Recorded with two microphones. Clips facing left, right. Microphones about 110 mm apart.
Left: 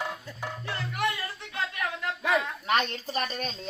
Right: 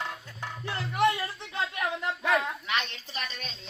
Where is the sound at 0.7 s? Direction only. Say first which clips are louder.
Right 5 dB; 20° right (ahead or behind).